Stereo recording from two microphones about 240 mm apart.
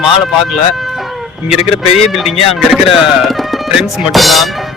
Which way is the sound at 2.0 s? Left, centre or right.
Centre.